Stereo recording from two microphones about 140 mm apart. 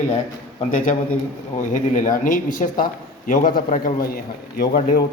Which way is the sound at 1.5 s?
65° left (ahead or behind).